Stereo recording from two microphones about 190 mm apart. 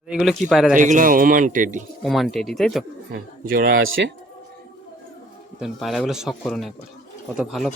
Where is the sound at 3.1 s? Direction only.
50° right (ahead or behind).